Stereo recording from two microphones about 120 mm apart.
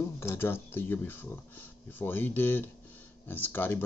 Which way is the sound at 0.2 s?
20° left (ahead or behind).